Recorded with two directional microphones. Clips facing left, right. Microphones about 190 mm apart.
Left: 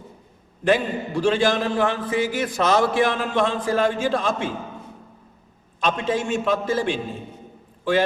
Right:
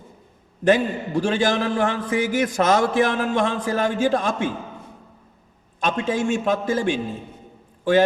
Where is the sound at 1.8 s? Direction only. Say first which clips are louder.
Even; 45° right (ahead or behind).